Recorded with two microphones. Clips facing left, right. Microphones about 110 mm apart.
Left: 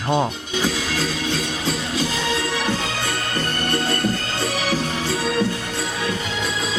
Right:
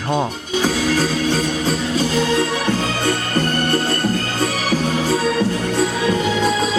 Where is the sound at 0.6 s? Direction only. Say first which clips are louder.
Right 6 dB; 45° right (ahead or behind).